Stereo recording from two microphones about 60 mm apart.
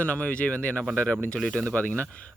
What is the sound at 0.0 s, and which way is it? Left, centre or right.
Speech, left.